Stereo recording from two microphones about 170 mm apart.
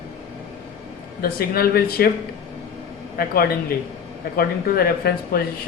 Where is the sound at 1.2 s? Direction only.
65° left (ahead or behind).